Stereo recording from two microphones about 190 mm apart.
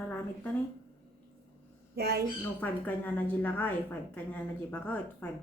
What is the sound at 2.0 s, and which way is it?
Speech, 55° right (ahead or behind).